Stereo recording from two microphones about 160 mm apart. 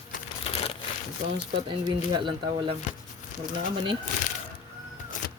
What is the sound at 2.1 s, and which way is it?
Speech, 30° right (ahead or behind).